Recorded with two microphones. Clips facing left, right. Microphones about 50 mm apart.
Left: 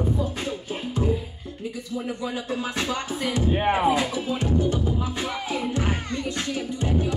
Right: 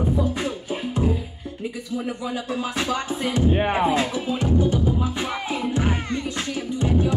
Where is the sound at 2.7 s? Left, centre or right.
Right.